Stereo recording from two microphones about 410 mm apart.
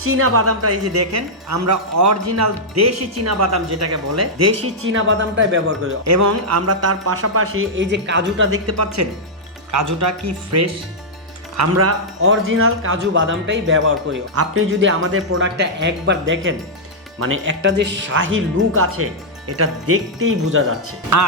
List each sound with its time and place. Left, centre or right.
0.0 s speech: right
6.1 s speech: right